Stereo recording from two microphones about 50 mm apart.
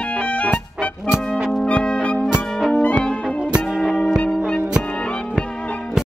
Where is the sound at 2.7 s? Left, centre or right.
Left.